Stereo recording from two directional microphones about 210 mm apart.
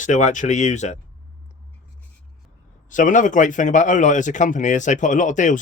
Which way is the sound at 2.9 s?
35° left (ahead or behind).